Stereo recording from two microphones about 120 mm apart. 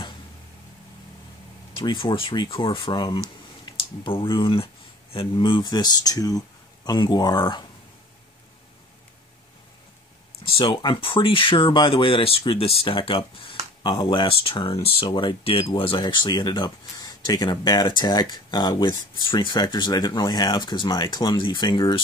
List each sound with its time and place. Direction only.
1.8 s speech: 40° left (ahead or behind)
10.6 s speech: 40° left (ahead or behind)
16.0 s speech: 40° left (ahead or behind)